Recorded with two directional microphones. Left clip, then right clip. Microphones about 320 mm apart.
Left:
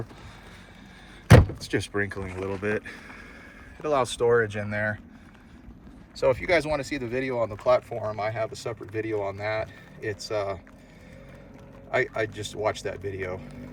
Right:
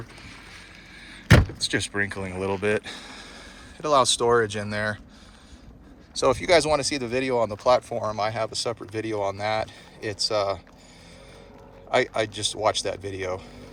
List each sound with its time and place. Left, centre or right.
1.6 s speech: centre
6.1 s speech: centre
11.9 s speech: centre